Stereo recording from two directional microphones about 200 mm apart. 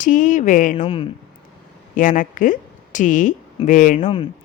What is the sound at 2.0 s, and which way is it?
A woman's voice, 40° left (ahead or behind).